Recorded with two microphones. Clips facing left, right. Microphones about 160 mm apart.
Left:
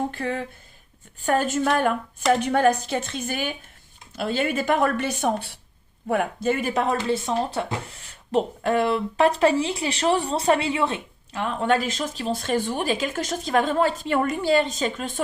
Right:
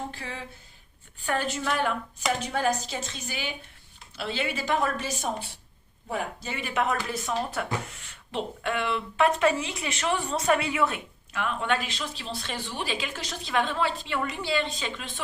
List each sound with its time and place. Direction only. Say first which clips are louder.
0.1 s a woman's voice: left 10 dB; 55° left (ahead or behind)
1.2 s a woman's voice: left 7 dB; 45° left (ahead or behind)